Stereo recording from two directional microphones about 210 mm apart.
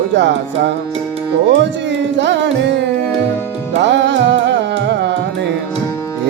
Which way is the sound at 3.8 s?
55° right (ahead or behind).